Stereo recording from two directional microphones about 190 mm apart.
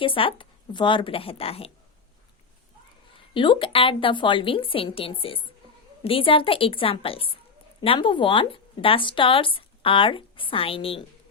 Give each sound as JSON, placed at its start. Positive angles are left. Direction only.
{"t": 0.0, "sound": "speech", "side_deg": 25}
{"t": 3.3, "sound": "speech", "side_deg": 25}